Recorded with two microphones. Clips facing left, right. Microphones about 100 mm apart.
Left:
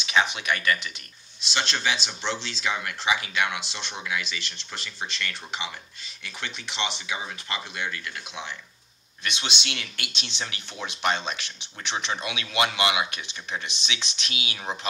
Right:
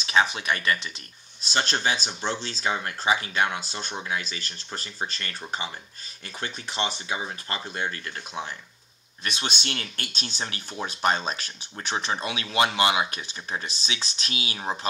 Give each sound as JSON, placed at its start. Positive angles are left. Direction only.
{"t": 0.0, "sound": "speech", "side_deg": -35}